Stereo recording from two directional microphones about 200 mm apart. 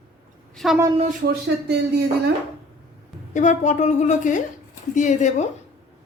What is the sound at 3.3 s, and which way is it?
A woman's voice, 40° left (ahead or behind).